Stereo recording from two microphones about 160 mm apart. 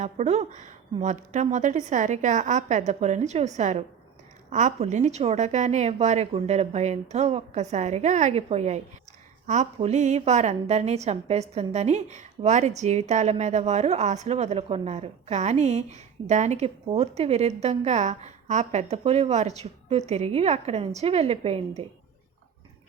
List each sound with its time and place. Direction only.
0.0 s a woman's voice: 45° right (ahead or behind)